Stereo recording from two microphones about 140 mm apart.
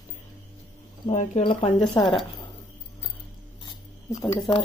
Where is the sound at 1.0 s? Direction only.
55° left (ahead or behind).